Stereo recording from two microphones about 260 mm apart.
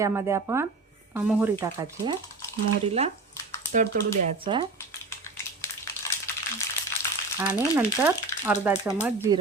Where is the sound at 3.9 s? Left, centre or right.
Right.